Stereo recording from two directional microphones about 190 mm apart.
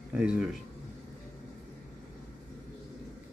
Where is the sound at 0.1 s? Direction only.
5° right (ahead or behind).